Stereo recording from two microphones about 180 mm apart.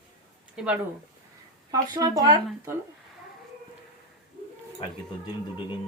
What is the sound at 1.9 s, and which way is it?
Speech, 20° right (ahead or behind).